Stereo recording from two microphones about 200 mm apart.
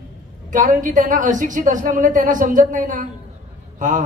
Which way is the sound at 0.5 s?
40° right (ahead or behind).